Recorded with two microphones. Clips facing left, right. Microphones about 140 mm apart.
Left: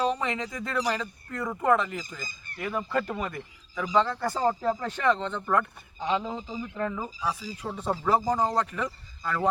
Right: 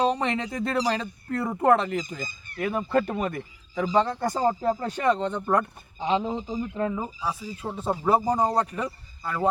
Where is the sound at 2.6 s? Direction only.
20° right (ahead or behind).